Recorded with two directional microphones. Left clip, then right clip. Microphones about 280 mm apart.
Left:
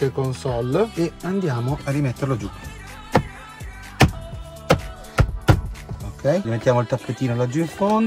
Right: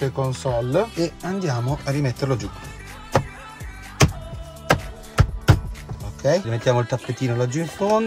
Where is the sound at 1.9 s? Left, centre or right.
Right.